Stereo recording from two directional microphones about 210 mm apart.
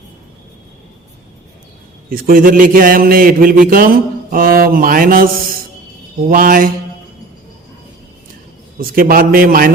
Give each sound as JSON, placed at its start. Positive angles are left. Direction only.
{"t": 2.0, "sound": "speech", "side_deg": -45}
{"t": 6.2, "sound": "mantra", "side_deg": -40}
{"t": 8.8, "sound": "speech", "side_deg": -45}